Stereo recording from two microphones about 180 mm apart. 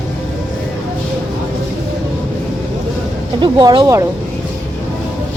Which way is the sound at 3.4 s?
25° right (ahead or behind).